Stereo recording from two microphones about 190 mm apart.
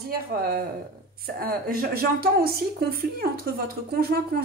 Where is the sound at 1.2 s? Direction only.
50° right (ahead or behind).